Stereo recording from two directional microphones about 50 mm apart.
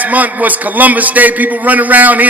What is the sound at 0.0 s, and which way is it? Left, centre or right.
A man's voice, right.